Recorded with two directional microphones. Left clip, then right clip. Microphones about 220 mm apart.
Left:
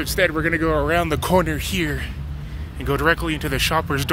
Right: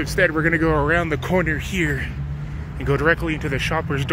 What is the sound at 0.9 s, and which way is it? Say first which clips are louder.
Speech: left 2 dB; 20° left (ahead or behind).